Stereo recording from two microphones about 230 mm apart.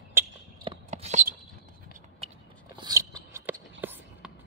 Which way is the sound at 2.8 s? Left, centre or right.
Centre.